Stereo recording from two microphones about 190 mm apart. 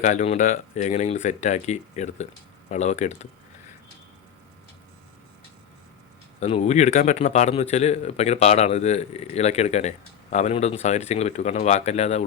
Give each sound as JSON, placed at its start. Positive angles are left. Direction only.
{"t": 0.0, "sound": "a man's voice", "side_deg": 40}
{"t": 6.4, "sound": "a man's voice", "side_deg": 35}